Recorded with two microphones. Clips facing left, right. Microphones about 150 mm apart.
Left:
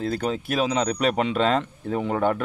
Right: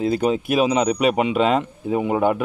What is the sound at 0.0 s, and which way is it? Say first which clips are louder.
Speech: right 6 dB; 15° right (ahead or behind).